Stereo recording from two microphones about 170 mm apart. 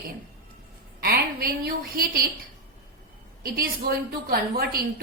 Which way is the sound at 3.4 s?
60° right (ahead or behind).